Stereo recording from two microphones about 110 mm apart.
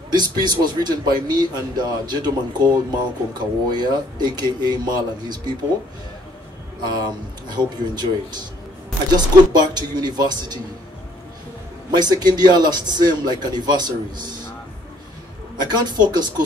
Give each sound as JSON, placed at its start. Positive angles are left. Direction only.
{"t": 0.1, "sound": "a man's voice", "side_deg": -40}
{"t": 6.8, "sound": "a man's voice", "side_deg": -40}
{"t": 11.9, "sound": "a man's voice", "side_deg": -40}
{"t": 15.7, "sound": "a man's voice", "side_deg": -40}